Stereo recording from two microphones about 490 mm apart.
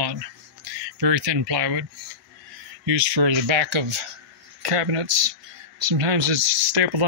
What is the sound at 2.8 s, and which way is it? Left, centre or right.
Speech, right.